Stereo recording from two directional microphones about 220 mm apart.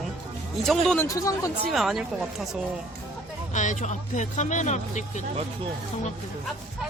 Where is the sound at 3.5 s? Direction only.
35° left (ahead or behind).